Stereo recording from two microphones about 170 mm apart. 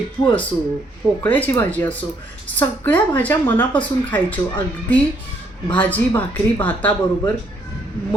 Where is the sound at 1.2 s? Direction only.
10° left (ahead or behind).